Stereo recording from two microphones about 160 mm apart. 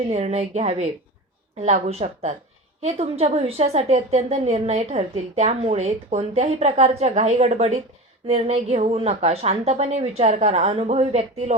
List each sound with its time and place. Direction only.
0.1 s a woman's voice: 40° right (ahead or behind)